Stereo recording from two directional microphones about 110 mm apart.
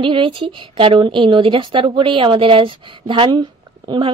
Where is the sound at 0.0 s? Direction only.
50° right (ahead or behind).